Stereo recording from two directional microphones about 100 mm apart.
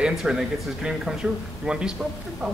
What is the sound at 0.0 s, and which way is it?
Speech, 5° right (ahead or behind).